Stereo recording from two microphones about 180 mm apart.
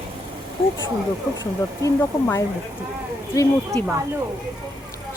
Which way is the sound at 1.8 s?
15° left (ahead or behind).